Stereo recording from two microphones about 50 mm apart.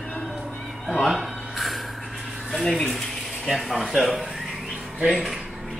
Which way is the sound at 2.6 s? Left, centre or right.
Centre.